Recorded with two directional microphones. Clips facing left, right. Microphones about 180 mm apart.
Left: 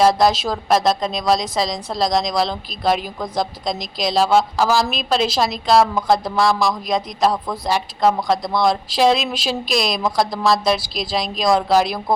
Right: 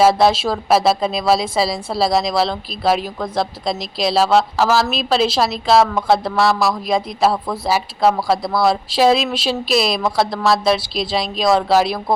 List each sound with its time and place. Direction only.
0.0 s speech: 5° right (ahead or behind)